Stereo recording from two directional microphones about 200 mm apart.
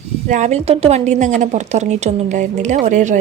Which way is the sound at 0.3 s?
35° right (ahead or behind).